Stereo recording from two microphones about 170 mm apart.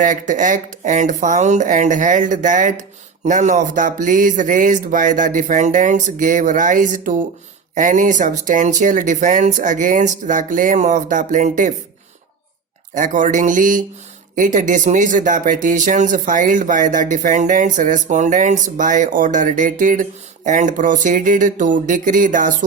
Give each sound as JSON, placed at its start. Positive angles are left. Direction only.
{"t": 0.0, "sound": "speech", "side_deg": -50}
{"t": 12.9, "sound": "speech", "side_deg": -50}